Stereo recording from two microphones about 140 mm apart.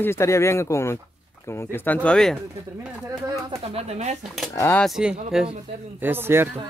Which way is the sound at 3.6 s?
45° right (ahead or behind).